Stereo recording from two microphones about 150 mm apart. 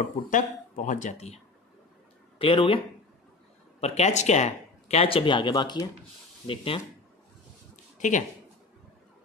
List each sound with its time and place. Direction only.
0.3 s speech: 55° left (ahead or behind); by 2.8 s 35° left (ahead or behind)
3.8 s speech: 45° left (ahead or behind)
7.7 s a sound: 55° left (ahead or behind)